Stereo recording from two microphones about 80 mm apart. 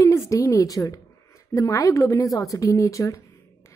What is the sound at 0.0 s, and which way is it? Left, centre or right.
A woman's voice, left.